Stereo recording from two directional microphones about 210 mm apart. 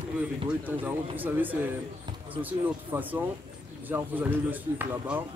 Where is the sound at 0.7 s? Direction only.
10° right (ahead or behind).